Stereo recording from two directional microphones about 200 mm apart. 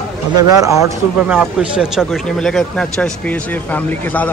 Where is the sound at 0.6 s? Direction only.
15° right (ahead or behind).